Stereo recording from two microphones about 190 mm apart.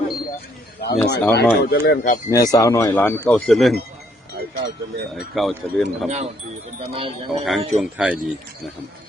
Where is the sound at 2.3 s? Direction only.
20° left (ahead or behind); by 3.7 s centre (ahead or behind).